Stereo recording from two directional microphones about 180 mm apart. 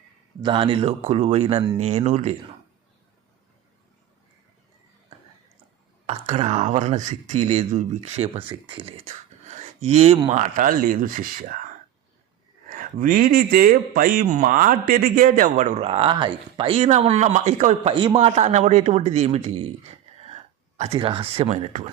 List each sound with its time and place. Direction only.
0.4 s speech: 30° right (ahead or behind)
6.1 s speech: 40° right (ahead or behind)
12.7 s speech: 50° right (ahead or behind)
17.9 s a man's voice: 25° right (ahead or behind)
18.3 s speech: 40° right (ahead or behind)